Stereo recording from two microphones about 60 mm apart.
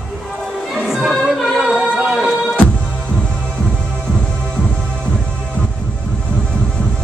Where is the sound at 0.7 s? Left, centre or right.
Centre.